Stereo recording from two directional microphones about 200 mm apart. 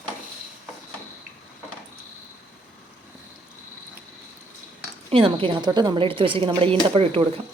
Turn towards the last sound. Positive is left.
turn(degrees=-25)  # may be behind; listen again after turning